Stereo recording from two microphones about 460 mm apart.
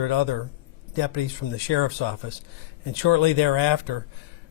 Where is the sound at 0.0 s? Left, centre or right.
Left.